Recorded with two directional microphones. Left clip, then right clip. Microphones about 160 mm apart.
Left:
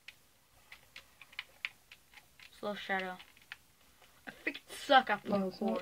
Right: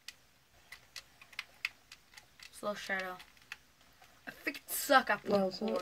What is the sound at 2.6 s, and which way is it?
Speech, 35° left (ahead or behind).